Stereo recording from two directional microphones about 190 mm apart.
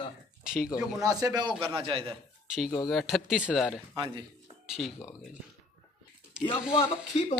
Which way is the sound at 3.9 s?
25° right (ahead or behind).